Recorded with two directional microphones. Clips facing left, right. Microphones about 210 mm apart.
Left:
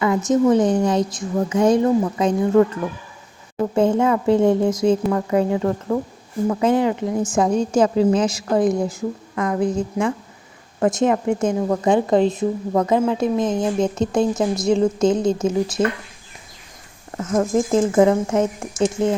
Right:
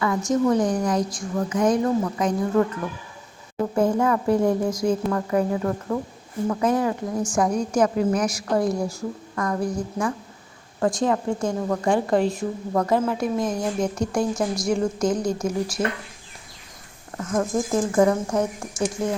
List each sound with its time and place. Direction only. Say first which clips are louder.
0.0 s a woman's voice: left 4 dB; 20° left (ahead or behind)
3.8 s a woman's voice: left 3 dB; 25° left (ahead or behind)
17.2 s a woman's voice: left 5 dB; 25° left (ahead or behind)